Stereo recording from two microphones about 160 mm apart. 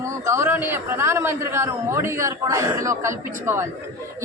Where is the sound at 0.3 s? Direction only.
15° right (ahead or behind).